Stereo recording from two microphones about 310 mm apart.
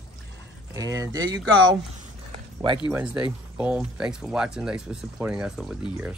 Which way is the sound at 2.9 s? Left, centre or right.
Centre.